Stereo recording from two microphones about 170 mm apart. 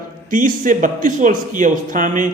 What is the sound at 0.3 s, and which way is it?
Speech, 50° right (ahead or behind).